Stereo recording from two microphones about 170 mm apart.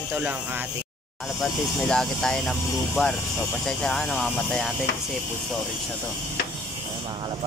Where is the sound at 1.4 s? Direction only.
Centre (ahead or behind).